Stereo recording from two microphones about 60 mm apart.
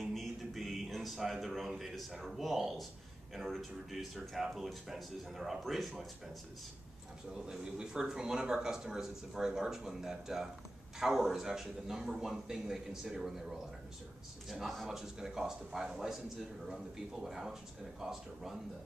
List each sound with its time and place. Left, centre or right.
0.0 s a sound: centre
2.2 s speech: centre
7.3 s speech: centre